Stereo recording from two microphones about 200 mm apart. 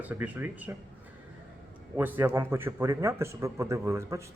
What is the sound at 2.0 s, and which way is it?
A man's voice, 10° right (ahead or behind).